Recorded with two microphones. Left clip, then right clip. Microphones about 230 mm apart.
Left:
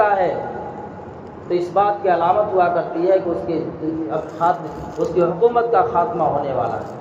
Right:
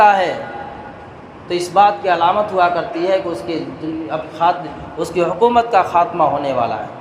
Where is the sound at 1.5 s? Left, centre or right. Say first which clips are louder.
Right 5 dB; right.